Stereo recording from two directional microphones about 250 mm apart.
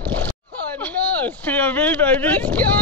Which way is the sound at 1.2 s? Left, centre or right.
Centre.